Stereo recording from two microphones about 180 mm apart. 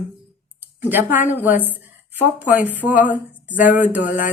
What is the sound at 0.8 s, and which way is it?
Speech, 10° right (ahead or behind).